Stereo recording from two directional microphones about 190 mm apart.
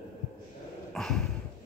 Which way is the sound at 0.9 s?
5° left (ahead or behind).